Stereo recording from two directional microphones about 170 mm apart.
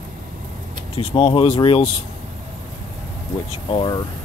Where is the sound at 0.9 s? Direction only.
35° left (ahead or behind).